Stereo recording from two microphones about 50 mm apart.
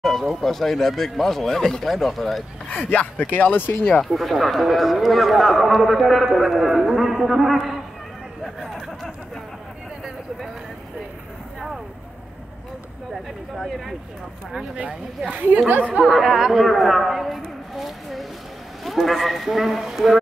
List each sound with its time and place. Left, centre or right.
0.0 s a man's voice: centre
2.7 s speech: left
4.0 s a man's voice: centre
13.1 s a sound: centre
14.8 s speech: right
15.9 s chatter: centre
18.9 s a man's voice: centre